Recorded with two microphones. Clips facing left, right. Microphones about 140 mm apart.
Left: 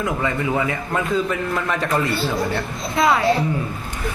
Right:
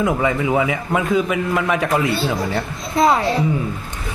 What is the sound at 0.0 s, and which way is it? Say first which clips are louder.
Speech: right 4 dB; 15° right (ahead or behind).